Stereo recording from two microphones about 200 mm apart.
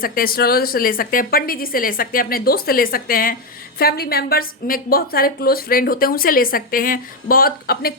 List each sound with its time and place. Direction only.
0.0 s a woman's voice: 45° left (ahead or behind)